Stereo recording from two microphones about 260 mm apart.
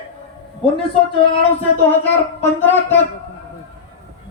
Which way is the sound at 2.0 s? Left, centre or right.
Centre.